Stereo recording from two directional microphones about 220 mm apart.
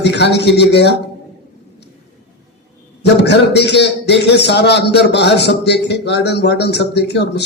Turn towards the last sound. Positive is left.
turn(degrees=50)  # may be behind; listen again after turning